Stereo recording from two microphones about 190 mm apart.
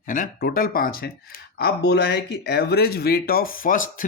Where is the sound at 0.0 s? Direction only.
45° left (ahead or behind).